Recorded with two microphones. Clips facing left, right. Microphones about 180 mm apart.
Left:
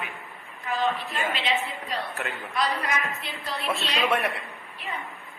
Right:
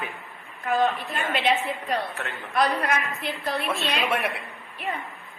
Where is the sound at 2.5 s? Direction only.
55° right (ahead or behind).